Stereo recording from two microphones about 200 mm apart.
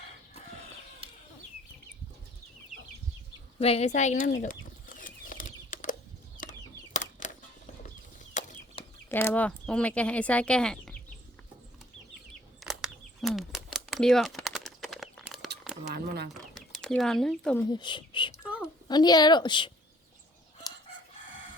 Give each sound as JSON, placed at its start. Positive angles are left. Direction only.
{"t": 1.0, "sound": "chicken", "side_deg": -25}
{"t": 3.6, "sound": "speech", "side_deg": 30}
{"t": 4.4, "sound": "chicken", "side_deg": 40}
{"t": 9.0, "sound": "speech", "side_deg": 10}
{"t": 12.6, "sound": "a sound", "side_deg": 0}
{"t": 15.9, "sound": "a sound", "side_deg": -55}
{"t": 16.3, "sound": "bird", "side_deg": 0}
{"t": 17.7, "sound": "speech", "side_deg": 25}
{"t": 18.4, "sound": "a sound", "side_deg": -5}
{"t": 18.9, "sound": "a woman's voice", "side_deg": 20}